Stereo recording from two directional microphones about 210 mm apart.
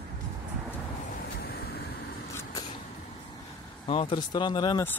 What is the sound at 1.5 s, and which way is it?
Vehicle, 45° left (ahead or behind).